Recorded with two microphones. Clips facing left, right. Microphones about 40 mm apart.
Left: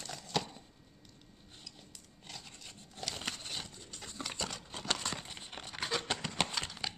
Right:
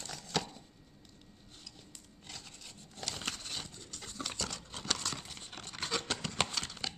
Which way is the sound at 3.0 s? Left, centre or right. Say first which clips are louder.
Even; centre.